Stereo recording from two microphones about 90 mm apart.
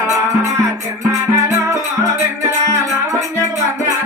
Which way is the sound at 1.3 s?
35° right (ahead or behind).